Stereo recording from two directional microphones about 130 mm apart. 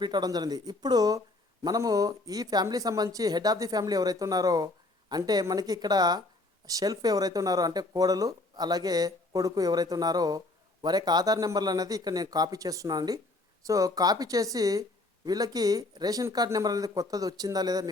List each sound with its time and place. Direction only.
0.0 s speech: 35° right (ahead or behind)